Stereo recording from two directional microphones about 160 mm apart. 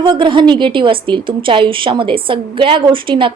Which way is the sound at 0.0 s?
30° right (ahead or behind).